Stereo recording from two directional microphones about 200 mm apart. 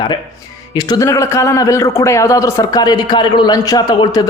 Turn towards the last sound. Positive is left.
turn(degrees=20)  # may be behind; listen again after turning